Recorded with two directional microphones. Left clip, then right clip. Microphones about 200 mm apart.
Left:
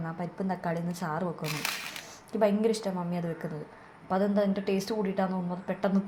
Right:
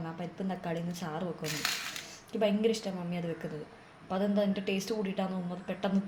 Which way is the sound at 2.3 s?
15° left (ahead or behind).